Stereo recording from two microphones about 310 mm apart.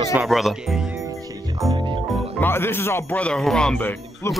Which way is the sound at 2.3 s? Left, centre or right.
Centre.